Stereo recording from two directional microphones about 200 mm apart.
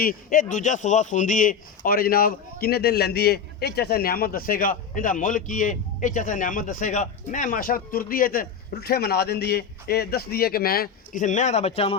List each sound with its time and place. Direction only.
0.0 s a man's voice: 45° left (ahead or behind)